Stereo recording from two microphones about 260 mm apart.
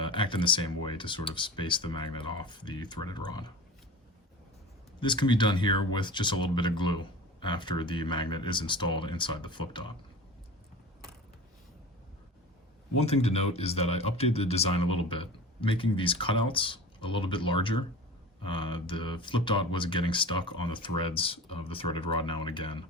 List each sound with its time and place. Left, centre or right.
0.0 s speech: centre
4.9 s speech: centre
13.0 s speech: left